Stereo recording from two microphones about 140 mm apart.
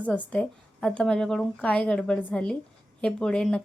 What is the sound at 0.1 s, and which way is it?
A woman's voice, 5° left (ahead or behind).